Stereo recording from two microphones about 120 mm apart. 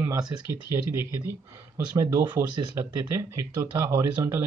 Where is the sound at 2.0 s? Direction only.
25° right (ahead or behind).